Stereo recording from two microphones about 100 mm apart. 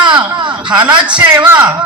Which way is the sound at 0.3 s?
50° right (ahead or behind).